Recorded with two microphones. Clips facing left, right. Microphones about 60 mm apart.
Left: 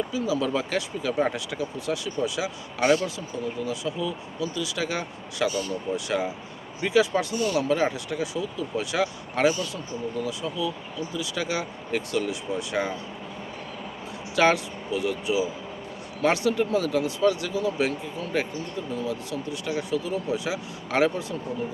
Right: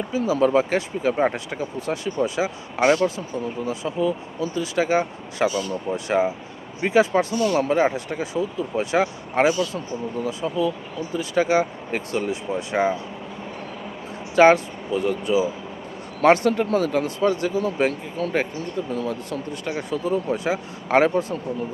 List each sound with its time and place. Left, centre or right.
0.1 s speech: right
14.3 s speech: right